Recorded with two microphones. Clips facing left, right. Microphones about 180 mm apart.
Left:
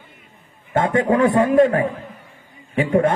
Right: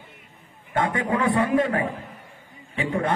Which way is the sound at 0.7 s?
25° left (ahead or behind).